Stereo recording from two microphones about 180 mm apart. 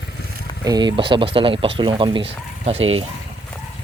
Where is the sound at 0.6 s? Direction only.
20° right (ahead or behind).